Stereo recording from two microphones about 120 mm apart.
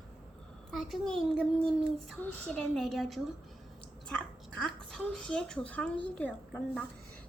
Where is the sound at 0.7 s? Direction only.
Centre (ahead or behind).